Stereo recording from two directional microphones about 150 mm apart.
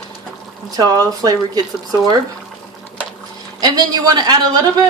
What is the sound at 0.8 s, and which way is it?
Speech, 25° right (ahead or behind).